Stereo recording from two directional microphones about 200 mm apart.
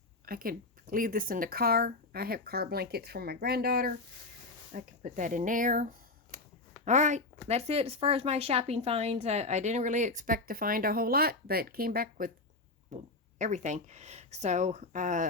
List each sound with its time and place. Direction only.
0.3 s speech: 45° right (ahead or behind)
4.7 s speech: 40° right (ahead or behind)